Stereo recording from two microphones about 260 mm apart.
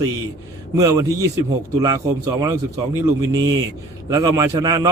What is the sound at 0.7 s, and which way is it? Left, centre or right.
Speech, centre.